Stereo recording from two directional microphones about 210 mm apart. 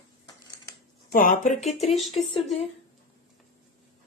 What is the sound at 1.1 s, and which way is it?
Speech, 40° left (ahead or behind).